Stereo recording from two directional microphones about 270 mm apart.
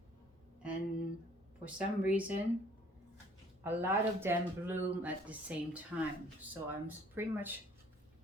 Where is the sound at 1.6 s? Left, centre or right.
Centre.